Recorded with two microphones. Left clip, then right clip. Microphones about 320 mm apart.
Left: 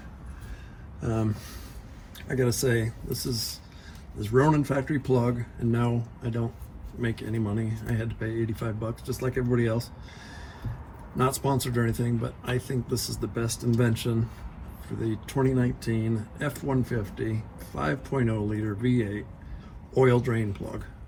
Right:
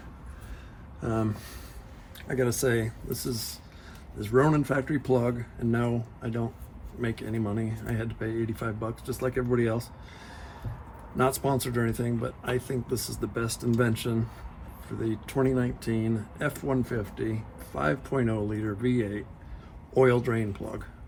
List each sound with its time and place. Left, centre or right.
1.0 s speech: right
11.2 s speech: right